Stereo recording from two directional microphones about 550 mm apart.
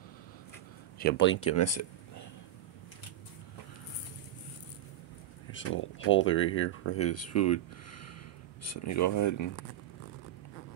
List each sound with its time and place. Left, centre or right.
0.9 s speech: centre
5.5 s speech: left